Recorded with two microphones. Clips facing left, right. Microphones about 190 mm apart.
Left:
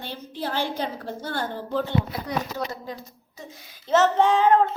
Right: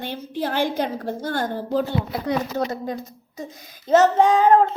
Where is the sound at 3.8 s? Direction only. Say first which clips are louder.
Right 4 dB; 40° right (ahead or behind).